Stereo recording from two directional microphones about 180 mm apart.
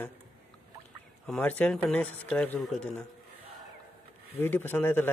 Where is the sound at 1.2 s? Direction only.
5° left (ahead or behind).